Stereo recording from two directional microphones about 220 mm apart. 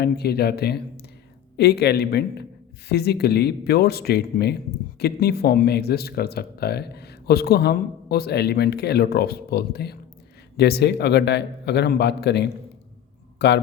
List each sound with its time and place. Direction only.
0.0 s speech: 45° left (ahead or behind)